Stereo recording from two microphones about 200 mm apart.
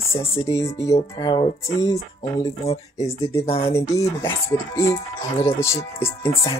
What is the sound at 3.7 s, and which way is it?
Speech, 15° left (ahead or behind).